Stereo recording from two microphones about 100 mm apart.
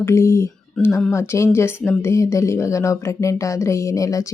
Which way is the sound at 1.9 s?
25° left (ahead or behind).